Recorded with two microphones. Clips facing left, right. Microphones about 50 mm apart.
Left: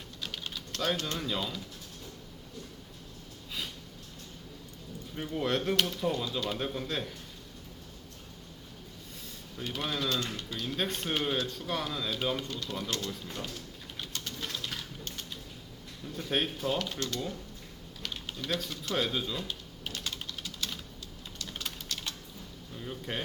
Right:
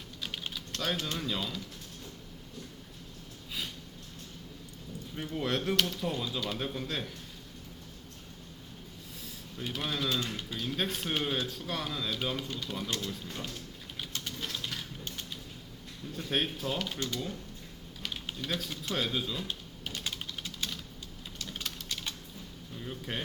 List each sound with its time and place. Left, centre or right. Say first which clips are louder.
0.2 s typing: right 1 dB; centre
0.5 s speech: left 3 dB; centre
5.3 s speech: left 2 dB; centre
9.1 s a sound: even; centre
10.3 s speech: even; centre
12.5 s speech: even; centre
13.9 s typing: right 1 dB; centre
16.1 s speech: left 1 dB; centre
18.0 s typing: even; centre
18.9 s speech: left 2 dB; centre
19.9 s typing: even; centre
21.9 s typing: even; centre
22.8 s speech: left 1 dB; centre